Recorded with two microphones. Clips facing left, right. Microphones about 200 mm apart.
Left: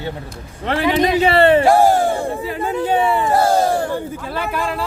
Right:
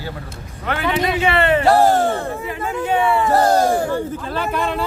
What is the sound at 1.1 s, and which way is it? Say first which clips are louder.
Speech: left 6 dB; 35° left (ahead or behind).